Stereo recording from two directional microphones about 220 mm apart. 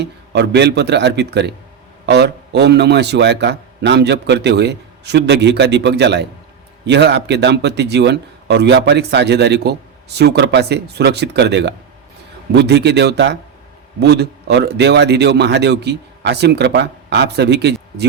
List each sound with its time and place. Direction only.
0.0 s a man's voice: 50° right (ahead or behind)